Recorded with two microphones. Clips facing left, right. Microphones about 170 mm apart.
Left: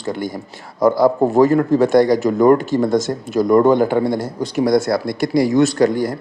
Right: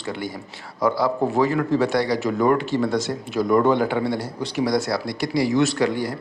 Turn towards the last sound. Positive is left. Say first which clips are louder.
# left 6 dB
turn(degrees=45)  # may be behind; listen again after turning